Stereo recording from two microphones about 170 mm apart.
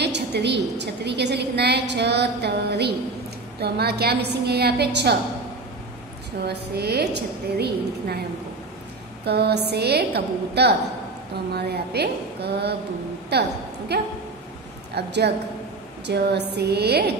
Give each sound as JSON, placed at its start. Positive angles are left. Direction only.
{"t": 0.0, "sound": "a woman's voice", "side_deg": -80}
{"t": 6.4, "sound": "a woman's voice", "side_deg": -70}
{"t": 9.2, "sound": "a woman's voice", "side_deg": -75}
{"t": 15.0, "sound": "a woman's voice", "side_deg": -85}